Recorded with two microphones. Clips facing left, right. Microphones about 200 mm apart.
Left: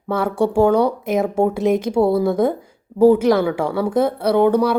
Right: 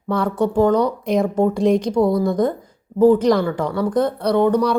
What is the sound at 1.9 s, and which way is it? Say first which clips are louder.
Speech: left 1 dB; 25° left (ahead or behind).